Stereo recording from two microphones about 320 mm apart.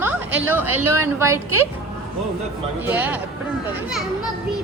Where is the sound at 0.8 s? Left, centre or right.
Right.